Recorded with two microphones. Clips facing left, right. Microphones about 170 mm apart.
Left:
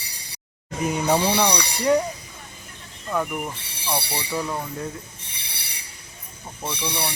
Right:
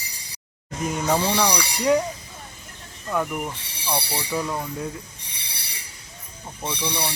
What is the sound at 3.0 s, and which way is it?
Speech, centre (ahead or behind).